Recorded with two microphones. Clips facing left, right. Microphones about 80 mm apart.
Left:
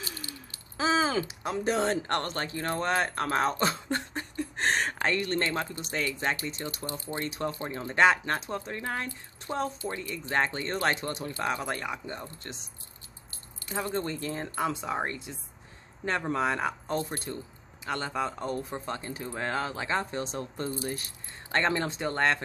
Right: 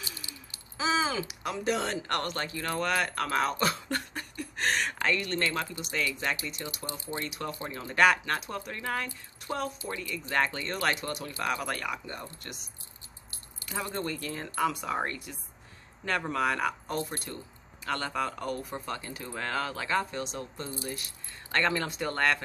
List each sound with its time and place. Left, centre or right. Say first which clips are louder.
0.2 s a sound: left 4 dB; centre
0.7 s speech: left 2 dB; left
13.7 s speech: left 2 dB; left